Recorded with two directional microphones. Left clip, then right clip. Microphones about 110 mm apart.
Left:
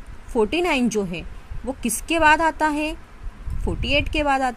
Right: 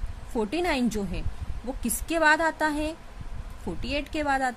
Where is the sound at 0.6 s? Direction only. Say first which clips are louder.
Left 6 dB; 20° left (ahead or behind).